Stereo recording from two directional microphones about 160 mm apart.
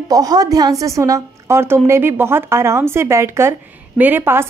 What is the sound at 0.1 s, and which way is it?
A woman's voice, 25° right (ahead or behind).